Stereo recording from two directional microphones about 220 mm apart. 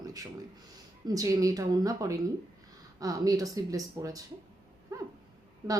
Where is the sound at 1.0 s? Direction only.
15° right (ahead or behind).